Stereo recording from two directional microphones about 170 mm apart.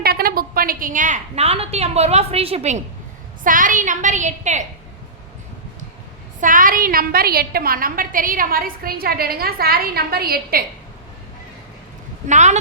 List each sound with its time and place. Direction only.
0.0 s a woman's voice: 60° right (ahead or behind); by 2.8 s 40° right (ahead or behind)
3.4 s a woman's voice: 50° right (ahead or behind)
6.4 s a woman's voice: 50° right (ahead or behind)
12.3 s a woman's voice: 45° right (ahead or behind)